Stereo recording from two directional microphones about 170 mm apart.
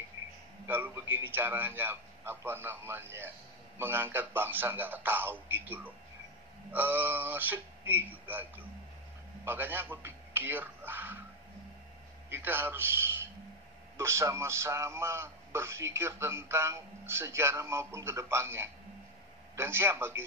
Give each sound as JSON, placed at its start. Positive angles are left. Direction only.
{"t": 0.7, "sound": "a man's voice", "side_deg": -10}
{"t": 12.3, "sound": "a man's voice", "side_deg": -10}